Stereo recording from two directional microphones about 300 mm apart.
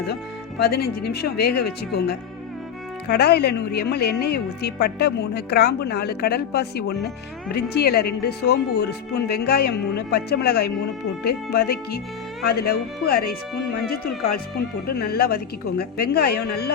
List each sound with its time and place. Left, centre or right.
1.2 s a woman's voice: left